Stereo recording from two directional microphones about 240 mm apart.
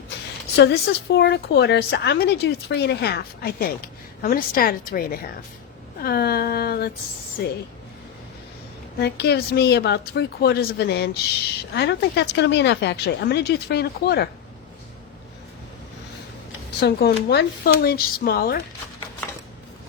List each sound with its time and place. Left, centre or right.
0.5 s a woman's voice: left
9.0 s a woman's voice: left
16.8 s speech: left